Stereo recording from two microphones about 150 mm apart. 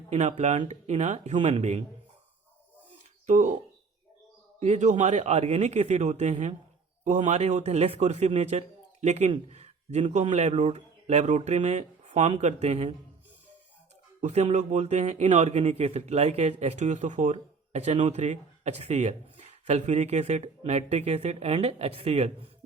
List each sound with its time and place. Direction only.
0.1 s speech: 50° right (ahead or behind)
3.2 s speech: 55° right (ahead or behind)
4.6 s speech: 50° right (ahead or behind)
14.2 s speech: 50° right (ahead or behind)